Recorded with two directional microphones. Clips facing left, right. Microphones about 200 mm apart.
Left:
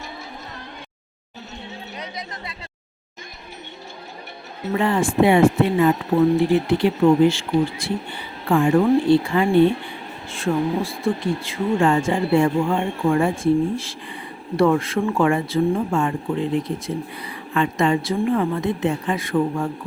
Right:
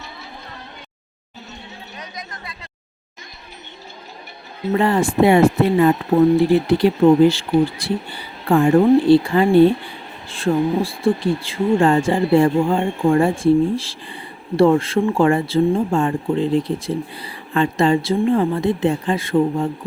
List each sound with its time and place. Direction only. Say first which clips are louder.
2.0 s chatter: left 1 dB; 25° left (ahead or behind)
4.8 s speech: right 2 dB; 40° right (ahead or behind)